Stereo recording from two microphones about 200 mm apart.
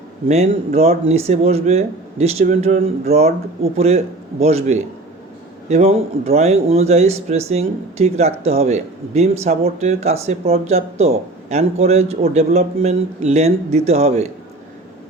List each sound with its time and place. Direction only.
0.3 s speech: 30° right (ahead or behind)